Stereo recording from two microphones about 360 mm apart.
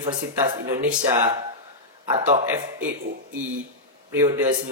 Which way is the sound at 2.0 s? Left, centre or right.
Centre.